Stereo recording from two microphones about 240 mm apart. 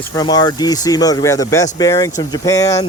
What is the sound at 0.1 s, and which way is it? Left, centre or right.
Speech, centre.